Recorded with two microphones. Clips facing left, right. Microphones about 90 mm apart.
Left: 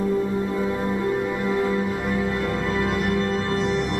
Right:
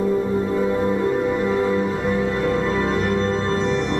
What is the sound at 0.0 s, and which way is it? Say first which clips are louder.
Music: right 3 dB; 20° right (ahead or behind).